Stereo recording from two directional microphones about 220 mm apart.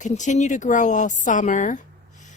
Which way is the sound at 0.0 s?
35° left (ahead or behind).